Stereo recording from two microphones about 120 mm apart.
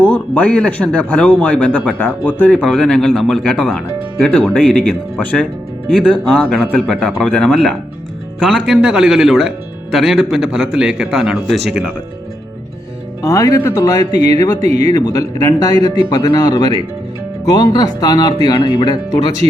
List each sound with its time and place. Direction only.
0.0 s a man's voice: 10° left (ahead or behind)
6.5 s a man's voice: 5° left (ahead or behind)
8.8 s a man's voice: 5° right (ahead or behind)
13.2 s speech: 30° left (ahead or behind)